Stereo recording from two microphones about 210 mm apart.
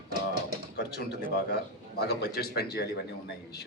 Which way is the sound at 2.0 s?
50° left (ahead or behind).